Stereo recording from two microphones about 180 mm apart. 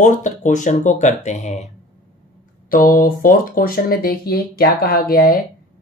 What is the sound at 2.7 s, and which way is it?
Speech, 50° left (ahead or behind).